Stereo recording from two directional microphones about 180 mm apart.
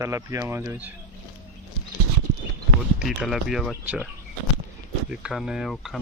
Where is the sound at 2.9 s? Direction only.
Centre (ahead or behind).